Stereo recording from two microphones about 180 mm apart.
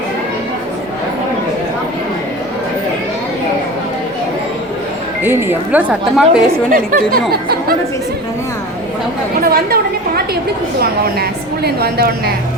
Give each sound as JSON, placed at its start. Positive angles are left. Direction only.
{"t": 5.2, "sound": "speech", "side_deg": -10}
{"t": 6.7, "sound": "speech", "side_deg": -50}
{"t": 9.4, "sound": "a woman's voice", "side_deg": -60}